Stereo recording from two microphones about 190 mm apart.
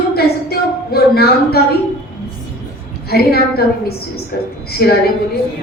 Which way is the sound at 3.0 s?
55° left (ahead or behind).